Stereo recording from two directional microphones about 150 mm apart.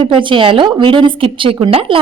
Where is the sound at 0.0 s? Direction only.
35° right (ahead or behind).